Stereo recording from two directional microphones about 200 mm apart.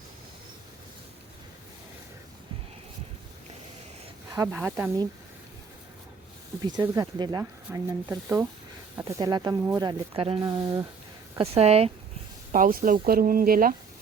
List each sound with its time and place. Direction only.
4.5 s speech: 5° right (ahead or behind)
6.7 s speech: 20° right (ahead or behind)
10.2 s speech: 25° right (ahead or behind)
11.3 s speech: 30° right (ahead or behind)
12.5 s speech: 45° right (ahead or behind)